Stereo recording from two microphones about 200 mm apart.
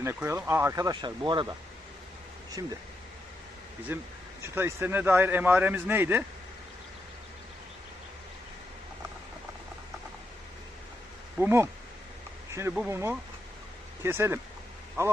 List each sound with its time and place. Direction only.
0.0 s speech: 10° right (ahead or behind)
2.6 s speech: 15° right (ahead or behind)
3.9 s speech: 10° right (ahead or behind)
11.3 s speech: 10° right (ahead or behind)